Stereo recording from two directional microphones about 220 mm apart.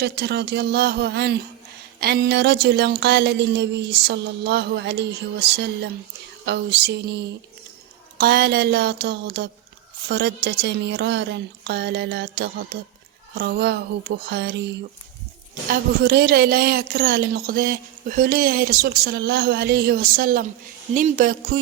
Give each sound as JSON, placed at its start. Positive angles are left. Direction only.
{"t": 0.0, "sound": "a woman's voice", "side_deg": -50}
{"t": 6.4, "sound": "a woman's voice", "side_deg": -50}
{"t": 8.2, "sound": "a woman's voice", "side_deg": -45}